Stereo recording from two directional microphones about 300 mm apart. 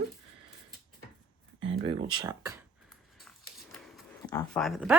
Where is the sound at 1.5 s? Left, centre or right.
Right.